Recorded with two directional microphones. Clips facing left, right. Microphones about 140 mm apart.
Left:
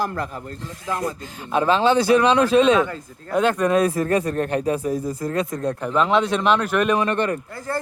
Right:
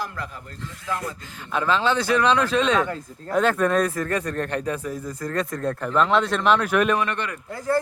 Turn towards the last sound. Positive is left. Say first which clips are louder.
# right 4 dB
turn(degrees=-15)  # may be behind; listen again after turning